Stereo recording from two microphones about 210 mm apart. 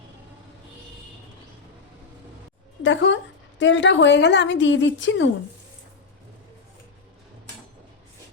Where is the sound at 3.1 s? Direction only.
60° left (ahead or behind).